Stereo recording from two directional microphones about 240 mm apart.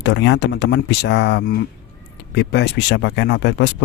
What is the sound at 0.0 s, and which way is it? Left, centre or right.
Speech, left.